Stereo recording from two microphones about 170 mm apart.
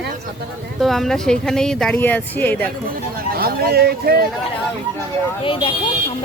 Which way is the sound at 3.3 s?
65° right (ahead or behind).